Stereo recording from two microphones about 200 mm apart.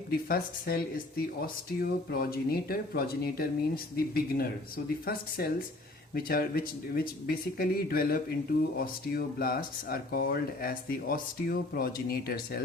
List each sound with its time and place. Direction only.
0.1 s speech: 50° left (ahead or behind)